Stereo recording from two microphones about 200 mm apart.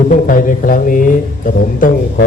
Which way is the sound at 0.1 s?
40° left (ahead or behind).